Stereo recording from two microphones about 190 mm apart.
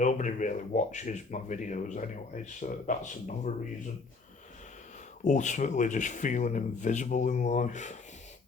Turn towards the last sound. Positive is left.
turn(degrees=40)  # may be behind; listen again after turning